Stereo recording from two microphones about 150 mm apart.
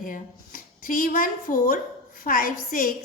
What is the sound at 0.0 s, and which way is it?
A woman's voice, 65° left (ahead or behind).